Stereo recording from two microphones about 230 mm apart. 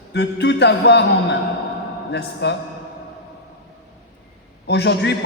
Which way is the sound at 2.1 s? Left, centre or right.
Left.